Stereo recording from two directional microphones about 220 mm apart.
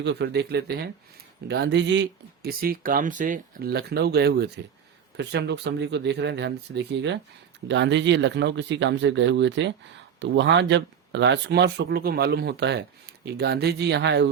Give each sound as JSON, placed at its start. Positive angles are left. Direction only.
{"t": 0.0, "sound": "speech", "side_deg": -50}